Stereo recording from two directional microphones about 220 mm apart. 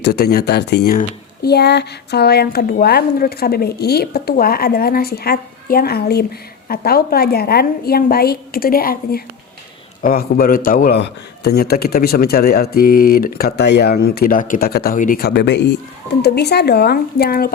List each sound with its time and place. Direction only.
0.0 s speech: 45° left (ahead or behind)